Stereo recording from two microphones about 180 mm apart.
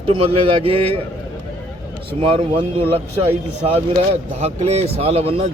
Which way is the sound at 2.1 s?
30° right (ahead or behind).